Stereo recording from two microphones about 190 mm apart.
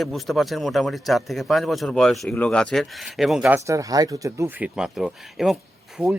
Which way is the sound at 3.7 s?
15° right (ahead or behind).